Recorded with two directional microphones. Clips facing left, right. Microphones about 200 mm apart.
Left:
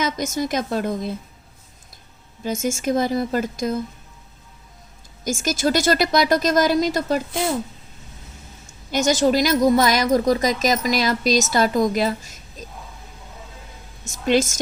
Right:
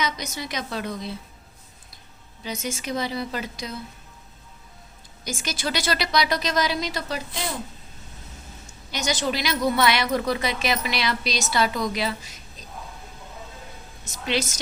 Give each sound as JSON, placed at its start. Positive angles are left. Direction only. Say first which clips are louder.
{"t": 0.0, "sound": "a woman's voice", "louder": "left 7 dB", "side_deg": 45}
{"t": 2.4, "sound": "a woman's voice", "louder": "left 8 dB", "side_deg": 45}
{"t": 5.2, "sound": "a woman's voice", "louder": "left 9 dB", "side_deg": 45}
{"t": 8.9, "sound": "a woman's voice", "louder": "left 9 dB", "side_deg": 45}
{"t": 14.1, "sound": "a woman's voice", "louder": "left 8 dB", "side_deg": 45}